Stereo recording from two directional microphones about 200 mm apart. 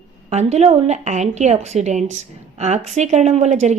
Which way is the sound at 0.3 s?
35° right (ahead or behind).